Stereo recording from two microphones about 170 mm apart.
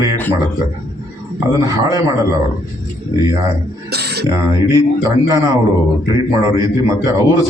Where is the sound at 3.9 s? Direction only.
75° right (ahead or behind).